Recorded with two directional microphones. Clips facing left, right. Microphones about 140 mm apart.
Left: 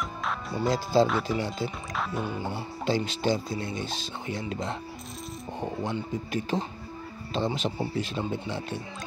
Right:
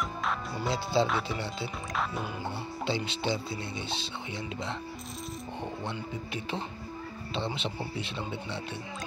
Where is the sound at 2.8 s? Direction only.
45° left (ahead or behind).